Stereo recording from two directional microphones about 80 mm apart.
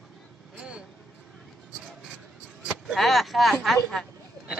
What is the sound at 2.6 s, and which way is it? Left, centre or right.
Vehicle, centre.